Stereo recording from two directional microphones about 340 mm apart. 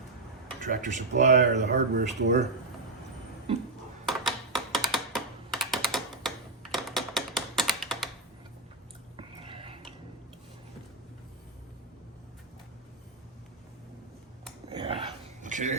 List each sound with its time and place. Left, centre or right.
0.6 s speech: right
4.0 s computer keyboard: centre
9.1 s a sound: centre
14.7 s dog: centre